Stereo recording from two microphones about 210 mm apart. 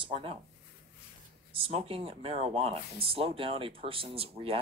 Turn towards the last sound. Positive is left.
turn(degrees=-25)  # may be behind; listen again after turning